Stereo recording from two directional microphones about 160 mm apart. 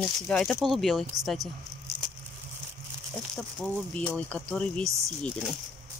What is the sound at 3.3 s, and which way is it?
Speech, centre (ahead or behind).